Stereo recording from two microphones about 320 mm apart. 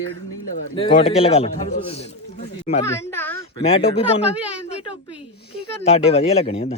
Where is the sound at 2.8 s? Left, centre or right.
Centre.